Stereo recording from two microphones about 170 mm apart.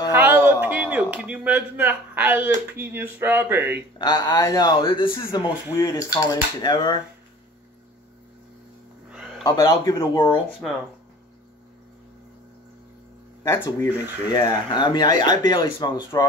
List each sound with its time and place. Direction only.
0.1 s speech: 10° right (ahead or behind)
4.0 s speech: 25° left (ahead or behind)
5.8 s speech: 20° left (ahead or behind)
9.4 s speech: 25° left (ahead or behind)
13.4 s speech: 15° left (ahead or behind)